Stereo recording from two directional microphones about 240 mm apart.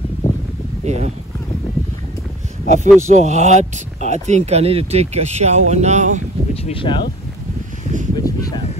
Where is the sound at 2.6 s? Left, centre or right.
Right.